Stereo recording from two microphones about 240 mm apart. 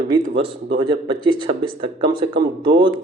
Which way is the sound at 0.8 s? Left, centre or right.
Right.